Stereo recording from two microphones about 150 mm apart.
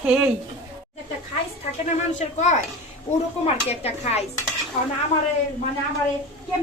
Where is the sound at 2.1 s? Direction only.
50° left (ahead or behind).